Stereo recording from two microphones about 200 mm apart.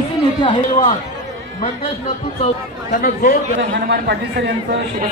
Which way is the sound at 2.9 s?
45° left (ahead or behind).